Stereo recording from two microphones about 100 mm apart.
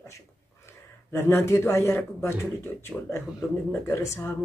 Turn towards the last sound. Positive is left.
turn(degrees=30)  # may be behind; listen again after turning